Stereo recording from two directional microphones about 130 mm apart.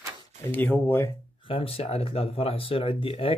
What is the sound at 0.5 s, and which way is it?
Speech, 15° left (ahead or behind).